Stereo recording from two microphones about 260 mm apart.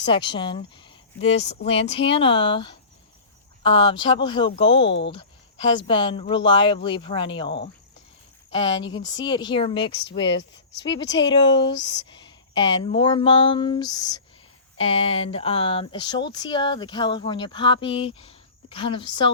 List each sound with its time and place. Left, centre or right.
0.0 s speech: centre
10.2 s speech: left
11.1 s speech: centre
11.7 s speech: left
12.1 s speech: centre